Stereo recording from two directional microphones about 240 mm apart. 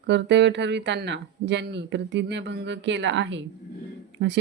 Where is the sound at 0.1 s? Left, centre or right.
Right.